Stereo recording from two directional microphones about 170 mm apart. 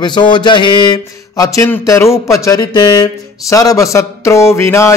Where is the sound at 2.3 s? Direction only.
20° left (ahead or behind).